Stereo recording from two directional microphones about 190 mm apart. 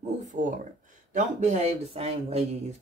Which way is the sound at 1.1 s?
40° right (ahead or behind).